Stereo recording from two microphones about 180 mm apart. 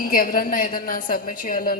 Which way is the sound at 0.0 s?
55° left (ahead or behind).